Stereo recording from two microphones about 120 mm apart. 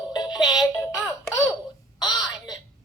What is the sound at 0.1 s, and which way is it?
Music, 35° left (ahead or behind).